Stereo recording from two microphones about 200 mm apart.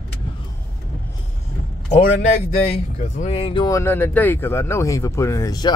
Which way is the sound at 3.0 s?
35° left (ahead or behind).